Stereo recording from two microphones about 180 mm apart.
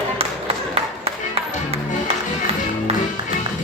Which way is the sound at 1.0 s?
35° right (ahead or behind).